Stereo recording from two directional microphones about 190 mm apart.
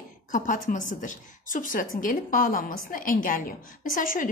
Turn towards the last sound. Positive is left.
turn(degrees=45)  # may be behind; listen again after turning